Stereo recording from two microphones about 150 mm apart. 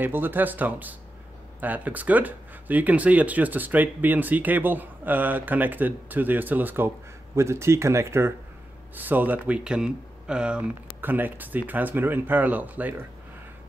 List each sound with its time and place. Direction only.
0.0 s speech: 15° right (ahead or behind)